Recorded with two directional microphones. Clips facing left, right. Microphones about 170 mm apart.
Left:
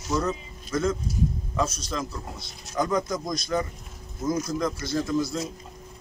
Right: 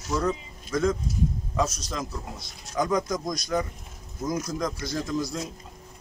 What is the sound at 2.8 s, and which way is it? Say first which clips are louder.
Speech: even; 15° right (ahead or behind).